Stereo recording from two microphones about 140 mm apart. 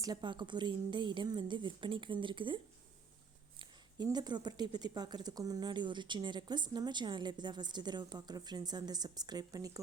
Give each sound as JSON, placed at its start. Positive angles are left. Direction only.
{"t": 0.0, "sound": "speech", "side_deg": -30}
{"t": 3.6, "sound": "speech", "side_deg": -30}